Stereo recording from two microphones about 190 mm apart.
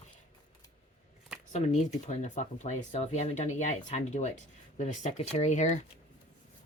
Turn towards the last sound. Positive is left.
turn(degrees=40)  # may be behind; listen again after turning